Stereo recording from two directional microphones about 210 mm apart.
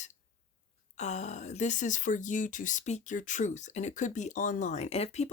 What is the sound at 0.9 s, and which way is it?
A woman's voice, 35° left (ahead or behind).